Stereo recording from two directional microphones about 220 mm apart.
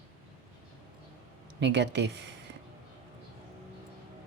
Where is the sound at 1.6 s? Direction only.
50° right (ahead or behind).